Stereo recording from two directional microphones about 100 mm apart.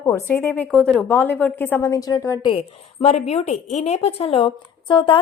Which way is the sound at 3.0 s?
90° left.